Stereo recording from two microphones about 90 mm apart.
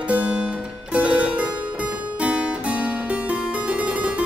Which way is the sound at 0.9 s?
15° right (ahead or behind).